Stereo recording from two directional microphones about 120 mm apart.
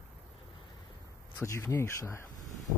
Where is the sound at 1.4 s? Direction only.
25° left (ahead or behind).